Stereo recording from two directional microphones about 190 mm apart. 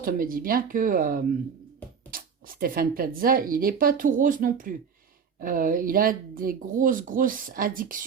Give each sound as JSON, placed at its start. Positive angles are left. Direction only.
{"t": 0.0, "sound": "speech", "side_deg": -50}